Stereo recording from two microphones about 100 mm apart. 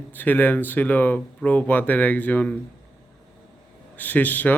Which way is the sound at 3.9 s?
15° left (ahead or behind).